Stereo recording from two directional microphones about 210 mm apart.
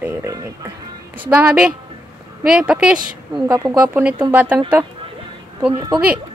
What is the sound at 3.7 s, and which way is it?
Speech, 5° right (ahead or behind).